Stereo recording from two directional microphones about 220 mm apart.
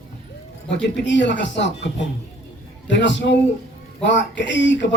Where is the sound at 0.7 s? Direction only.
55° left (ahead or behind).